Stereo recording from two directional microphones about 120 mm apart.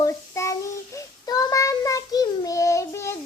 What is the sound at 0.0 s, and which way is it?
Child singing, 25° left (ahead or behind).